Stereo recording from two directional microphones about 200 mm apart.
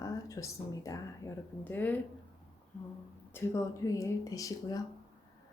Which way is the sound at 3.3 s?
10° left (ahead or behind).